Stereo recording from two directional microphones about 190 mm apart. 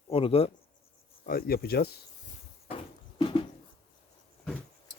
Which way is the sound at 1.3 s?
55° left (ahead or behind).